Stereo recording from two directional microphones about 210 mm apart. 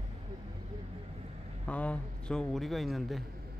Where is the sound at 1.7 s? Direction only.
5° left (ahead or behind).